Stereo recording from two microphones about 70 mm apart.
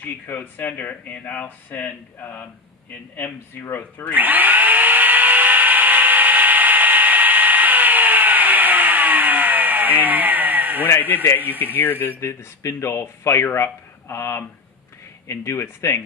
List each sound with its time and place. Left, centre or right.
0.0 s speech: left
3.6 s speech: left
4.1 s tools: right
11.6 s speech: left
12.2 s speech: left